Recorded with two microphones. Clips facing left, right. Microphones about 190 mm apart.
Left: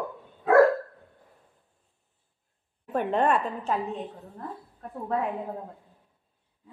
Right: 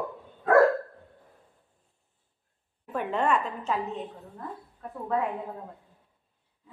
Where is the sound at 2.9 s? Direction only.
35° left (ahead or behind).